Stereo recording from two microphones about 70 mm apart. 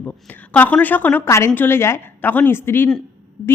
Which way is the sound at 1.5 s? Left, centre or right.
Left.